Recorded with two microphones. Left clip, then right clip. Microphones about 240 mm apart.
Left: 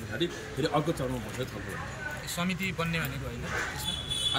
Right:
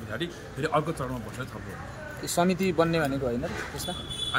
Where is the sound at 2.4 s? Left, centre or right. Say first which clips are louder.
Right 10 dB; right.